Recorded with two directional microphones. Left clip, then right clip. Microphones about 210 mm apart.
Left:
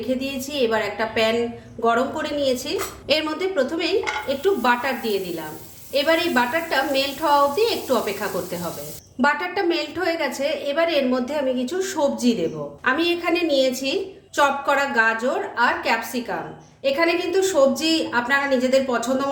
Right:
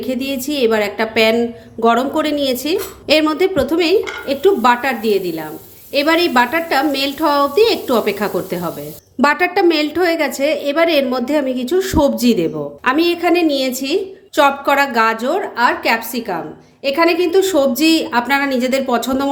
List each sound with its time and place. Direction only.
0.0 s a woman's voice: 40° right (ahead or behind)